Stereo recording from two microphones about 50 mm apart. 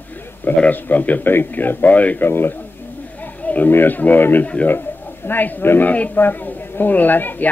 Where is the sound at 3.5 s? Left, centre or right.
Left.